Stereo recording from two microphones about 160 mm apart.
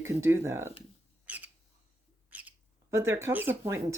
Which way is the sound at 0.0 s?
15° right (ahead or behind).